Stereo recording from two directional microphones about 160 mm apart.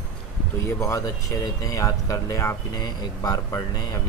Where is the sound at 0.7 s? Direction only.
15° left (ahead or behind).